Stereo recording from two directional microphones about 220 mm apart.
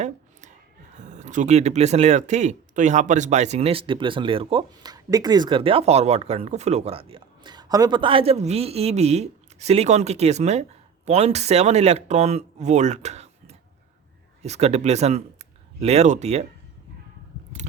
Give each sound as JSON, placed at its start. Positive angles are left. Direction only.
{"t": 0.9, "sound": "speech", "side_deg": -35}